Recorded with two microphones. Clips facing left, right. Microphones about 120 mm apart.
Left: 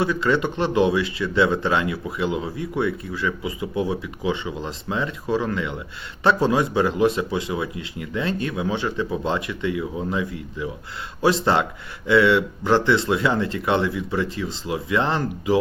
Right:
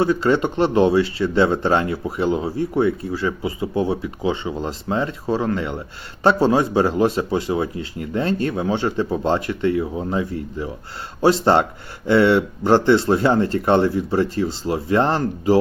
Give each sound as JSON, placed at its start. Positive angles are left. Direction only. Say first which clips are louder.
{"t": 0.0, "sound": "speech", "louder": "right 3 dB", "side_deg": -30}